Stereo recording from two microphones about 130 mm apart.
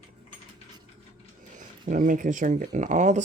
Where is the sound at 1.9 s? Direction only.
90° right; by 3.2 s 70° right (ahead or behind).